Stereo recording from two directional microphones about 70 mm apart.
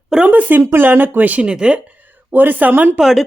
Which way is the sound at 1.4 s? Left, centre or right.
Centre.